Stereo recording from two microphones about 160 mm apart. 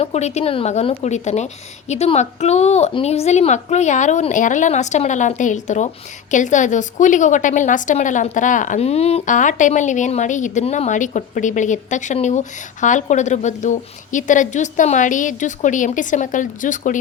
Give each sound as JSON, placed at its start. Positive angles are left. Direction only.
{"t": 0.0, "sound": "a woman's voice", "side_deg": 45}